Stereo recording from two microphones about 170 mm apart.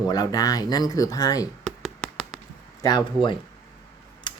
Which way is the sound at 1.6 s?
Centre (ahead or behind).